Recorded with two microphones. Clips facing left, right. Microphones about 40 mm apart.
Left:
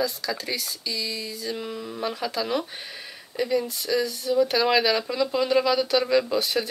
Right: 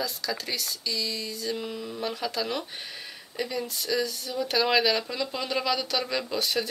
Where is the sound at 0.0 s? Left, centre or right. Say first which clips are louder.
Left 4 dB; centre.